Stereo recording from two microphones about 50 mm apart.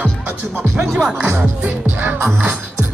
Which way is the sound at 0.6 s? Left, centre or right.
Centre.